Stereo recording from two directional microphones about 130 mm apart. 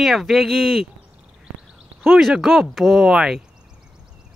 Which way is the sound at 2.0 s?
Centre (ahead or behind).